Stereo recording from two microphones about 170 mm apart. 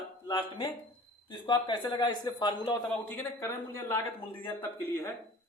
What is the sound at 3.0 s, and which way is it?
A man's voice, 15° left (ahead or behind).